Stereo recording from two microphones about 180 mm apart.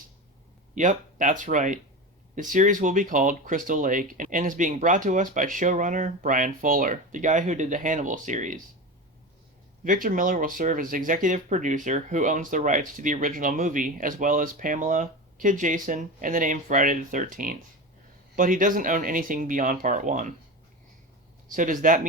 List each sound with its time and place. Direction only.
0.8 s speech: 45° right (ahead or behind)
9.8 s speech: 50° right (ahead or behind)
21.5 s speech: 45° right (ahead or behind)